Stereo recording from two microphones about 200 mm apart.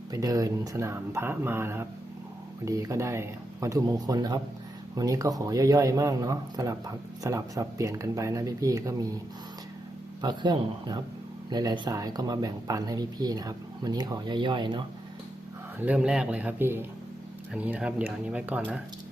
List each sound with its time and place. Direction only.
0.1 s a man's voice: 15° right (ahead or behind)
10.2 s speech: 20° right (ahead or behind)
15.8 s a man's voice: 5° right (ahead or behind)